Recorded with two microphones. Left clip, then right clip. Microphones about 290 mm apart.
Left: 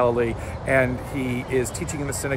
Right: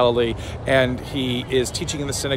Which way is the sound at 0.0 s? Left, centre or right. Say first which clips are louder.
Right 3 dB; centre.